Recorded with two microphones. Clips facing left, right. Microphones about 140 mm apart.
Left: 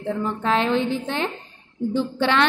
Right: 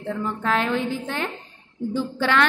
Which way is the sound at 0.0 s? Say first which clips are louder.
Left 2 dB; 20° left (ahead or behind).